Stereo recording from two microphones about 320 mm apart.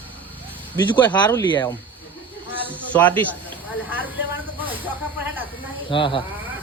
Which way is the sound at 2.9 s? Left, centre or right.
Centre.